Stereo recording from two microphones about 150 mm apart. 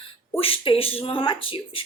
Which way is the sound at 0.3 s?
40° left (ahead or behind).